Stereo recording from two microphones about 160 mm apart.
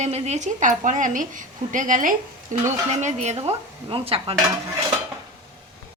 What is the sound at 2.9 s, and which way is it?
A woman's voice, 45° right (ahead or behind).